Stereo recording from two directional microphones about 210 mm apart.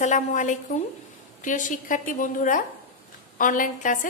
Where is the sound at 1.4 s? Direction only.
40° left (ahead or behind).